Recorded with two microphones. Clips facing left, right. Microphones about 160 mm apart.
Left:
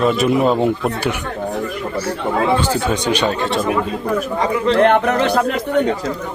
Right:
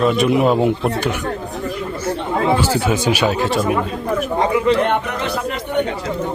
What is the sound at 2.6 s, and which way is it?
Speech, 5° right (ahead or behind).